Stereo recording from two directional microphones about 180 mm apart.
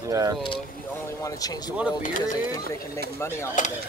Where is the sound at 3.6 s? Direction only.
45° left (ahead or behind).